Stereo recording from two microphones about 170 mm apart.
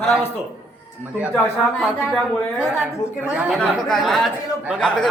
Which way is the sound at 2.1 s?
5° right (ahead or behind).